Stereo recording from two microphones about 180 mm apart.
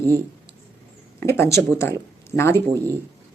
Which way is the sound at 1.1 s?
15° left (ahead or behind).